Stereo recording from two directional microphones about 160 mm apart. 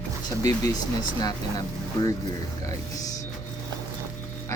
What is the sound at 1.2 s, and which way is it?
Speech, 25° left (ahead or behind).